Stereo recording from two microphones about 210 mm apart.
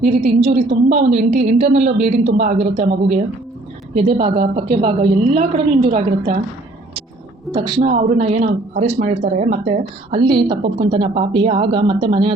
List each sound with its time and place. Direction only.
0.3 s a woman's voice: 25° right (ahead or behind)
7.5 s a woman's voice: 20° right (ahead or behind)
7.9 s a woman's voice: 35° right (ahead or behind)